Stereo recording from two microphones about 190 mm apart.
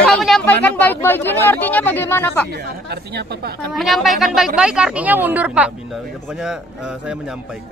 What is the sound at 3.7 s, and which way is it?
Speech, centre (ahead or behind).